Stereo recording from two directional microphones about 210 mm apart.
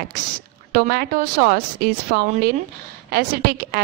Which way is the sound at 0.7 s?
45° right (ahead or behind).